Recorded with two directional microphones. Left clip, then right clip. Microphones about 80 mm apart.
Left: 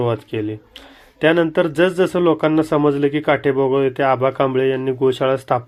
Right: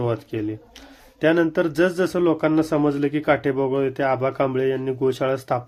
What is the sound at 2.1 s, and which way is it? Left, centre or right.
Speech, left.